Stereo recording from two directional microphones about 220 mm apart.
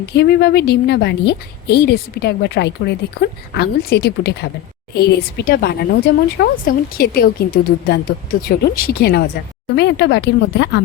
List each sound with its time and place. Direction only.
0.0 s a woman's voice: 50° left (ahead or behind)